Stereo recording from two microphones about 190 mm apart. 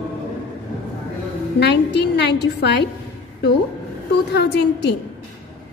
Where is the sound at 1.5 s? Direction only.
60° left (ahead or behind).